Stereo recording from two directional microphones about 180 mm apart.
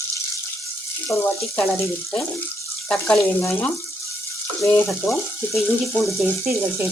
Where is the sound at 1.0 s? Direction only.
15° left (ahead or behind).